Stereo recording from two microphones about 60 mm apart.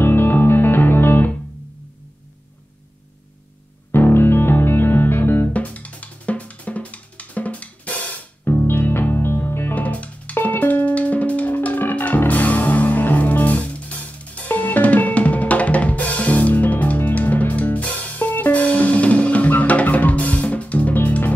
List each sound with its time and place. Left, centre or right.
0.0 s music: left
3.9 s music: left
5.5 s drum kit: left
8.6 s music: left
9.8 s drum kit: left
10.4 s music: left